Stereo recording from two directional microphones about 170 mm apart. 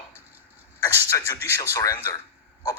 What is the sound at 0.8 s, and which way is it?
Speech, 15° left (ahead or behind).